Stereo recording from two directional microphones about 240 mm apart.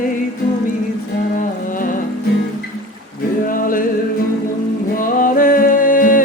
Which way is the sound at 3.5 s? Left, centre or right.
Left.